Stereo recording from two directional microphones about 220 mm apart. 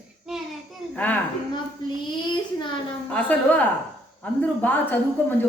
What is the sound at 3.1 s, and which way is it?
Speech, 5° left (ahead or behind).